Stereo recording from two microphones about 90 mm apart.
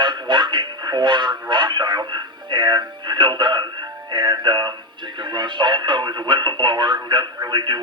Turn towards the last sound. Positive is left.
turn(degrees=-55)  # may be behind; listen again after turning